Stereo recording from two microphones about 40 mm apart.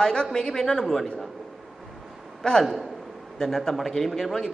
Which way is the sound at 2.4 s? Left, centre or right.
Centre.